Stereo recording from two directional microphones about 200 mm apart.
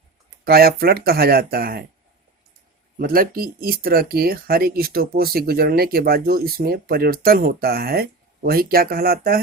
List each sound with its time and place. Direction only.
0.4 s speech: 50° right (ahead or behind)
3.0 s speech: 45° right (ahead or behind)